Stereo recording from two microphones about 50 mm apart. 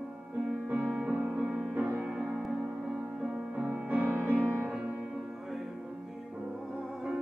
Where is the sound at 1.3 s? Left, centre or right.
Right.